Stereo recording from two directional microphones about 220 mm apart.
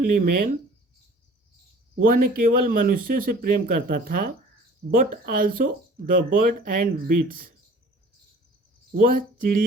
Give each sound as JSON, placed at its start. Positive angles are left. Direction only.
{"t": 0.0, "sound": "speech", "side_deg": -40}
{"t": 2.0, "sound": "speech", "side_deg": -40}
{"t": 9.0, "sound": "speech", "side_deg": -40}